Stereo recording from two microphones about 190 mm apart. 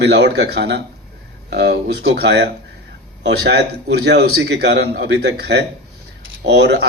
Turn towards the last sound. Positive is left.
turn(degrees=-60)  # may be behind; listen again after turning